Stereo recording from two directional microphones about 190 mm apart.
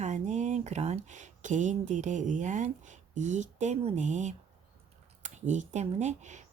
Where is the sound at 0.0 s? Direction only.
40° right (ahead or behind).